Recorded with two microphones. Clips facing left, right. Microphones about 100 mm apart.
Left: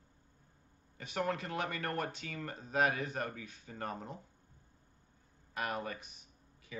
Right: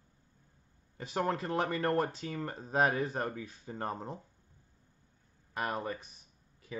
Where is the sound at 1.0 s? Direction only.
30° right (ahead or behind).